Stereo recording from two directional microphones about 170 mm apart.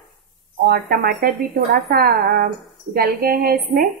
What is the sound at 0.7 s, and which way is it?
Speech, 60° right (ahead or behind).